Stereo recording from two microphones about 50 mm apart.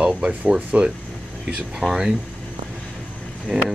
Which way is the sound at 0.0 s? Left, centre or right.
Right.